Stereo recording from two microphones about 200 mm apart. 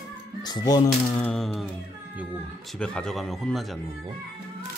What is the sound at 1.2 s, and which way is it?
Speech, centre (ahead or behind).